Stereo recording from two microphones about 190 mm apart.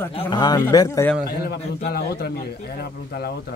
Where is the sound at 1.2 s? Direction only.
55° left (ahead or behind).